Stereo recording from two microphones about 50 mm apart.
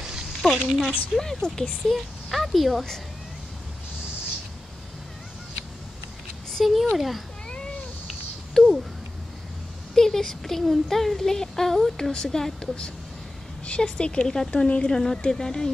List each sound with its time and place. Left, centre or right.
0.4 s a woman's voice: centre
1.2 s speech: centre
2.3 s a woman's voice: centre
6.5 s speech: centre
8.1 s a sound: centre
9.9 s speech: centre
13.7 s speech: centre